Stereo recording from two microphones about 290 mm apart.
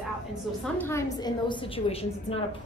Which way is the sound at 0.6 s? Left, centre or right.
Centre.